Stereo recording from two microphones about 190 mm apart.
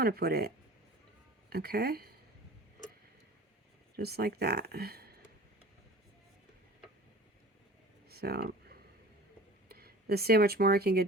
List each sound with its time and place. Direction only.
0.0 s speech: 55° right (ahead or behind)
3.9 s speech: 55° right (ahead or behind)
8.1 s speech: 55° right (ahead or behind)
9.6 s speech: 55° right (ahead or behind)